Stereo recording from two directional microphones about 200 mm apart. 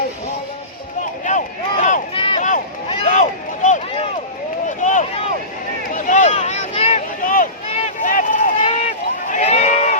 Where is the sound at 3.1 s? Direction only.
40° left (ahead or behind).